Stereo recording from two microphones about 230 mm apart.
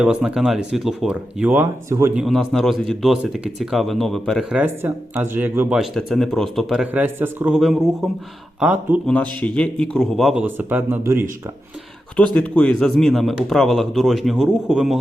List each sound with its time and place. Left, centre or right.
0.0 s speech: centre
9.4 s speech: centre
12.1 s speech: centre